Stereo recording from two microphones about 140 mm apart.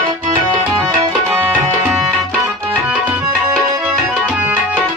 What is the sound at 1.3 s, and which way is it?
Tabla, 15° right (ahead or behind).